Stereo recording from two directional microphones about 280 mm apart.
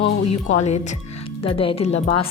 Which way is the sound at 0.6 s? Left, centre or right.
Left.